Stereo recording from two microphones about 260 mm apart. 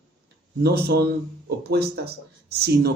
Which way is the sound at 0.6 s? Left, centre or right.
Right.